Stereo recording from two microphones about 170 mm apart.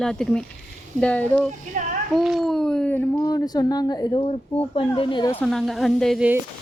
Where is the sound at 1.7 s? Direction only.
45° right (ahead or behind).